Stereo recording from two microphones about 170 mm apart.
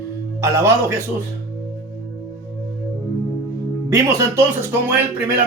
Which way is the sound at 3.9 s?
15° right (ahead or behind).